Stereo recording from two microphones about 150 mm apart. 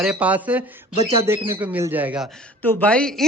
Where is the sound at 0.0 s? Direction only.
10° right (ahead or behind).